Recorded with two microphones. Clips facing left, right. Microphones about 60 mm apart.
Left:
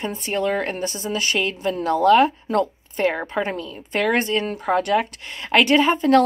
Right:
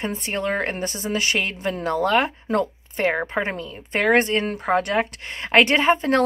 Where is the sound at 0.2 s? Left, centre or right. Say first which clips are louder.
Left 4 dB; right.